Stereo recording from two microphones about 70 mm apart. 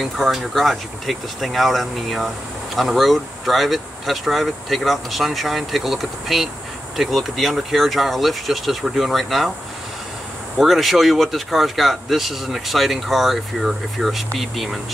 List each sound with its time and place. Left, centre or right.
0.0 s speech: centre
10.6 s speech: centre